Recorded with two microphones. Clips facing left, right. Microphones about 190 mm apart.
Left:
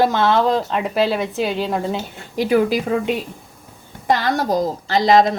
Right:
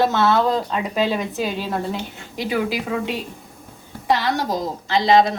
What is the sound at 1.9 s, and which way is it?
A woman's voice, 45° left (ahead or behind).